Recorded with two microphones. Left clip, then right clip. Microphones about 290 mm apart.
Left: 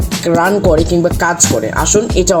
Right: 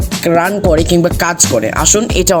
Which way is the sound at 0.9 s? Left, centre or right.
Right.